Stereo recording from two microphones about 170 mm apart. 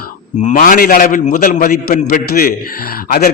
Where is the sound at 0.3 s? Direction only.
50° left (ahead or behind).